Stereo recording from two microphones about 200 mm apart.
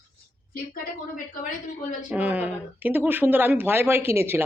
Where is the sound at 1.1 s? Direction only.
40° left (ahead or behind).